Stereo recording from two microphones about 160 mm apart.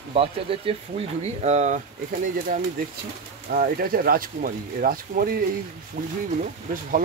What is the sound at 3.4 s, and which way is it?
Speech, 65° right (ahead or behind).